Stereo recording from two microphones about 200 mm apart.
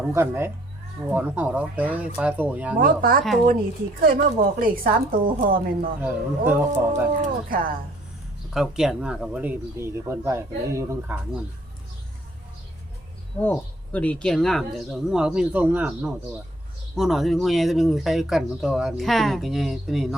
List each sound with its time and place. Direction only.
0.0 s speech: 10° right (ahead or behind)
2.7 s a woman's voice: 45° right (ahead or behind)
6.0 s speech: 10° right (ahead or behind)
7.2 s a woman's voice: 45° right (ahead or behind)
8.5 s speech: centre (ahead or behind)
13.4 s speech: 10° left (ahead or behind)